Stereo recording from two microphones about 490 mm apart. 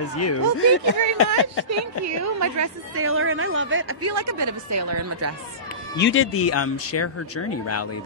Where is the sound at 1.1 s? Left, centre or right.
Left.